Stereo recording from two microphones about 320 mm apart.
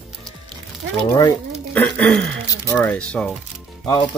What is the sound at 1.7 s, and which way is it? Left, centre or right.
Speech, centre.